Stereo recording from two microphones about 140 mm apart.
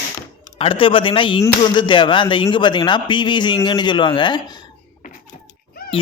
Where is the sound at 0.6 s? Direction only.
40° left (ahead or behind).